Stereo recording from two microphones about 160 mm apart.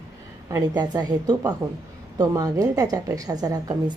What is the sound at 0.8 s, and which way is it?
Speech, 25° right (ahead or behind).